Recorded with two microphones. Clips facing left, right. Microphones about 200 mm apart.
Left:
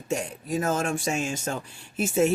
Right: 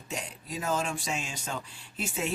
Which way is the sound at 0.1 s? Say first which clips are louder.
Left 10 dB; 50° left (ahead or behind).